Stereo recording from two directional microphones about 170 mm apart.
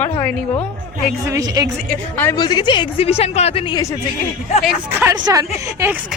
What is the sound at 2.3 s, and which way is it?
Speech, 25° left (ahead or behind).